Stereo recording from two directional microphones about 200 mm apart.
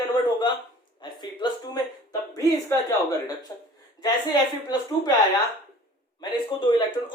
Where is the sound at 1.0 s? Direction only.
20° left (ahead or behind).